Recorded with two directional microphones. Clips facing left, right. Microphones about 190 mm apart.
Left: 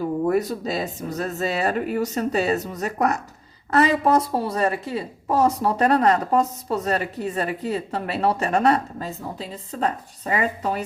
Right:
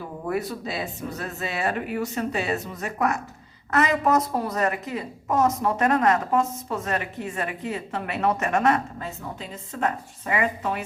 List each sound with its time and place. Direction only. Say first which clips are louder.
0.3 s a woman's voice: left 2 dB; 40° left (ahead or behind)